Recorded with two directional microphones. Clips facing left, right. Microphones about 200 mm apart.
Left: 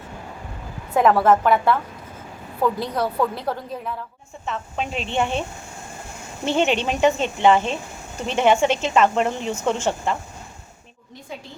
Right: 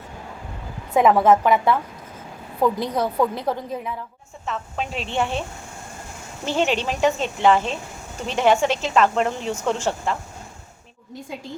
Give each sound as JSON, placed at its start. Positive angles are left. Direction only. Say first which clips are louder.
{"t": 1.1, "sound": "a woman's voice", "louder": "right 1 dB", "side_deg": -15}
{"t": 4.4, "sound": "a woman's voice", "louder": "left 1 dB", "side_deg": 0}
{"t": 6.4, "sound": "a woman's voice", "louder": "left 2 dB", "side_deg": 0}